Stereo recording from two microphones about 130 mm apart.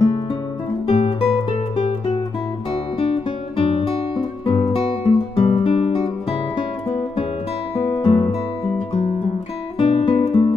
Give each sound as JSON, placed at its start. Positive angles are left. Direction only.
{"t": 0.8, "sound": "music", "side_deg": 50}
{"t": 3.0, "sound": "guitar", "side_deg": 50}
{"t": 4.5, "sound": "music", "side_deg": 45}
{"t": 7.7, "sound": "music", "side_deg": 50}
{"t": 9.8, "sound": "music", "side_deg": 45}